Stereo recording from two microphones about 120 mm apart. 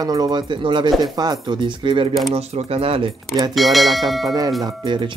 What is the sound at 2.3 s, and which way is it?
Speech, 55° right (ahead or behind).